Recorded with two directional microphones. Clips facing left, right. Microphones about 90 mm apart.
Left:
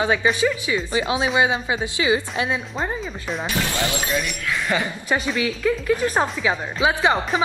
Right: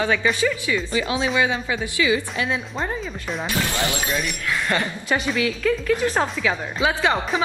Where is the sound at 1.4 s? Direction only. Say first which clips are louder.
Left 2 dB; 25° left (ahead or behind).